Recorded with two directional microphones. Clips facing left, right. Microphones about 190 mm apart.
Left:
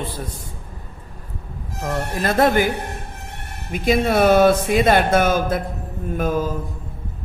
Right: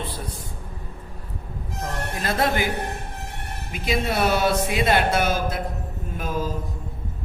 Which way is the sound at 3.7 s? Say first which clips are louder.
Left 7 dB; 50° left (ahead or behind).